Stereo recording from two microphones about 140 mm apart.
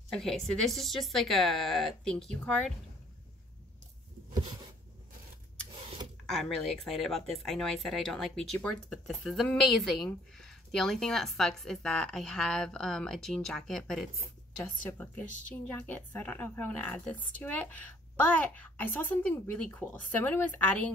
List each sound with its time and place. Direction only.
0.1 s speech: 5° left (ahead or behind)
5.7 s a sound: 35° right (ahead or behind)
6.3 s speech: 5° left (ahead or behind)
14.6 s a woman's voice: 15° left (ahead or behind)